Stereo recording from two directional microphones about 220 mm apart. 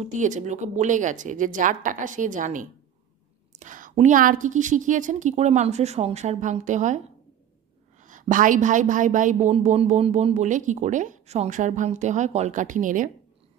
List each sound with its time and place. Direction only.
0.0 s a woman's voice: 35° right (ahead or behind)
8.0 s a woman's voice: 35° right (ahead or behind)